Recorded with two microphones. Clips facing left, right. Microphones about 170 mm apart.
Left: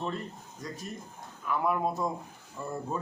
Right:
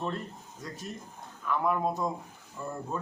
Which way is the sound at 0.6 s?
Centre (ahead or behind).